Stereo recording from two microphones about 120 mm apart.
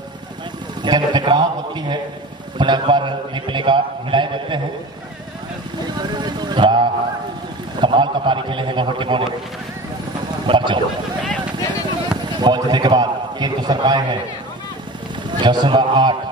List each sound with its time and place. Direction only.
0.8 s a man's voice: 40° right (ahead or behind)
5.9 s a sound: 35° right (ahead or behind)
7.8 s a man's voice: 40° right (ahead or behind)
10.4 s speech: 45° right (ahead or behind)
12.4 s a man's voice: 35° right (ahead or behind)
15.3 s a man's voice: 40° right (ahead or behind)